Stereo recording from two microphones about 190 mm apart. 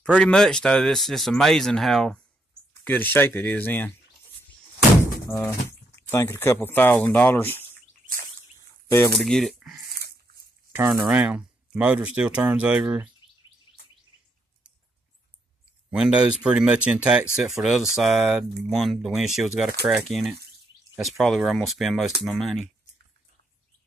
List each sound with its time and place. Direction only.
0.0 s speech: 5° left (ahead or behind)
5.3 s speech: 15° left (ahead or behind)
9.2 s speech: centre (ahead or behind)
9.9 s dog: 55° right (ahead or behind)
10.7 s speech: 10° right (ahead or behind)
15.9 s speech: 5° right (ahead or behind)